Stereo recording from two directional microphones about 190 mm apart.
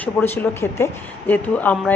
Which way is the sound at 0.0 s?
10° left (ahead or behind).